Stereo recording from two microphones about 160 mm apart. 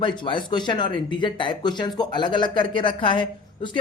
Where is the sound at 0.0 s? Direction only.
30° left (ahead or behind).